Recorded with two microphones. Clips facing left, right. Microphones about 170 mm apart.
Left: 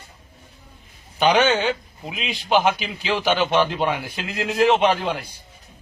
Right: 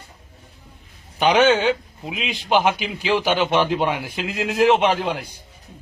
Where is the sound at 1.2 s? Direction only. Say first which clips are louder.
Right 2 dB; 10° right (ahead or behind).